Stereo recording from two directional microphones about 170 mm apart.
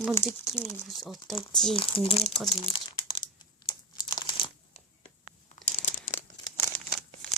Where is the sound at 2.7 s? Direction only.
30° left (ahead or behind).